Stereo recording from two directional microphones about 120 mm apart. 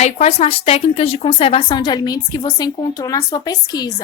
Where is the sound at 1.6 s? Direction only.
40° left (ahead or behind).